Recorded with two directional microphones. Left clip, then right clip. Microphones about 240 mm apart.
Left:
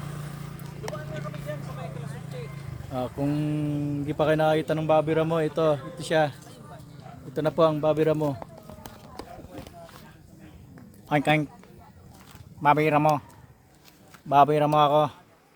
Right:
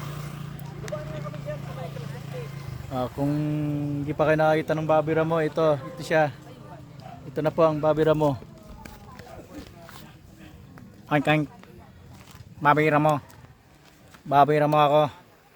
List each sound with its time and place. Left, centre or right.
0.0 s vehicle: right
2.9 s speech: centre
3.5 s a man's voice: centre
7.3 s speech: centre; by 8.4 s right
11.1 s a man's voice: centre
12.6 s a man's voice: centre
14.3 s a man's voice: centre